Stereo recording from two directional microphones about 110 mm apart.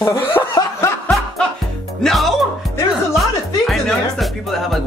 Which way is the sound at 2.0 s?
Centre (ahead or behind).